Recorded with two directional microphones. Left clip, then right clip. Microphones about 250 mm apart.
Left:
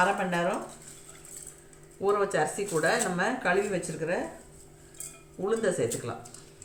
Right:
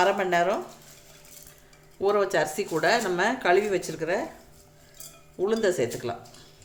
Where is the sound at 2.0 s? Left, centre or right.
Right.